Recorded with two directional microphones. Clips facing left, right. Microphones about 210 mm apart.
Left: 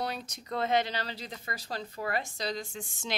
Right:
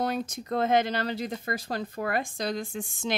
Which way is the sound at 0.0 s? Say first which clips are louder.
Right 7 dB; 50° right (ahead or behind).